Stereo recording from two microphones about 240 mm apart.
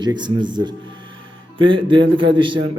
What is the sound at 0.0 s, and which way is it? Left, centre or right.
Speech, centre.